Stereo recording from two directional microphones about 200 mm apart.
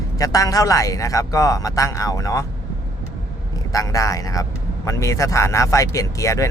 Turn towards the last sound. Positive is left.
turn(degrees=15)  # may be behind; listen again after turning